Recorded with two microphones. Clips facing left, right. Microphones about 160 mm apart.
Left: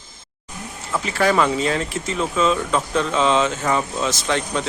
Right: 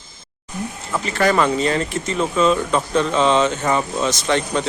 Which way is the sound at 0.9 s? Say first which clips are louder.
Right 1 dB; 5° left (ahead or behind).